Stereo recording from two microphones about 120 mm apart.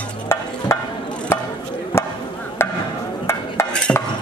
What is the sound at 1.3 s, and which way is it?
Chop, 20° left (ahead or behind).